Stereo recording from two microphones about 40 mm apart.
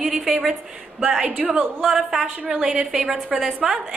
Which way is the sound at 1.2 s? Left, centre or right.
Right.